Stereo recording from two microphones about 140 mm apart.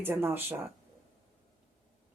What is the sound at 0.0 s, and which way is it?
Speech, 15° right (ahead or behind).